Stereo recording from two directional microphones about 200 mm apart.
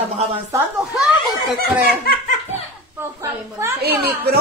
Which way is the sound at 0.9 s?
Centre (ahead or behind).